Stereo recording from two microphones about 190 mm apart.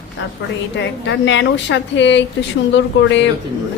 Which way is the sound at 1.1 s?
70° left (ahead or behind).